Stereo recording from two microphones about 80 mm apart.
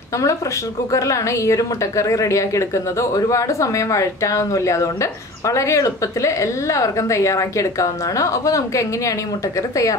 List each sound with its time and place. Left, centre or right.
0.9 s a woman's voice: left